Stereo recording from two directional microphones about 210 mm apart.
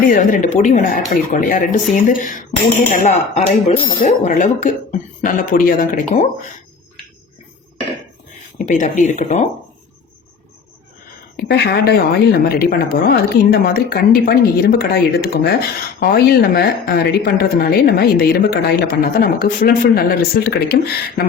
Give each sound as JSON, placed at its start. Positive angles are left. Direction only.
{"t": 0.1, "sound": "speech", "side_deg": 40}
{"t": 8.5, "sound": "speech", "side_deg": 35}
{"t": 11.3, "sound": "speech", "side_deg": 50}